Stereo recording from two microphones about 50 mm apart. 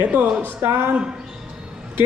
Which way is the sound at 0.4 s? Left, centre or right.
Right.